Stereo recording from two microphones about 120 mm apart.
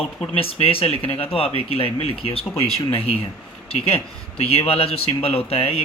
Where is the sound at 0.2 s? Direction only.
50° left (ahead or behind).